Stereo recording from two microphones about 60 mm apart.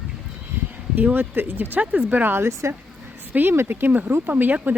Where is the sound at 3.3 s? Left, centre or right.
Right.